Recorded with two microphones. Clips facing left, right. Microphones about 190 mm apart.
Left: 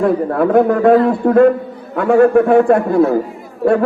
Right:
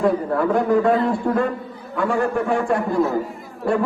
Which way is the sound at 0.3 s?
60° left (ahead or behind).